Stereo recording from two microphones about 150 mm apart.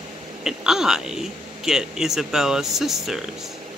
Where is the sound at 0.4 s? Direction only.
5° right (ahead or behind).